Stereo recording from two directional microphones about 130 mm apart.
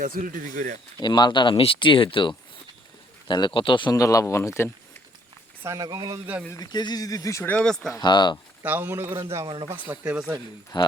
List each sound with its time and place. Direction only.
0.0 s speech: 90° right
0.5 s speech: 70° right (ahead or behind)
0.9 s speech: 35° left (ahead or behind)
3.9 s speech: 25° left (ahead or behind)
5.6 s speech: 30° right (ahead or behind)
6.5 s speech: 30° left (ahead or behind); by 7.9 s 5° left (ahead or behind)
7.9 s speech: 35° left (ahead or behind)
8.6 s speech: 15° right (ahead or behind)
10.7 s speech: 35° left (ahead or behind)